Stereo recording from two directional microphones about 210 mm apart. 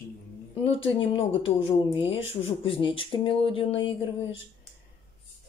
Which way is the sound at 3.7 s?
65° left (ahead or behind).